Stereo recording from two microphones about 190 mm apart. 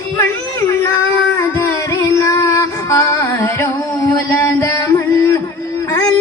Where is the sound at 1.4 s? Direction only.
15° left (ahead or behind).